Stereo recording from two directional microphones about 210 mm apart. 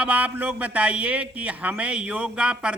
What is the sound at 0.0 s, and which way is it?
A man's voice, 5° right (ahead or behind).